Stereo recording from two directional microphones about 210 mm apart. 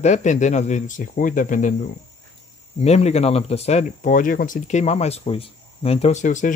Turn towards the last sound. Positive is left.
turn(degrees=35)  # may be behind; listen again after turning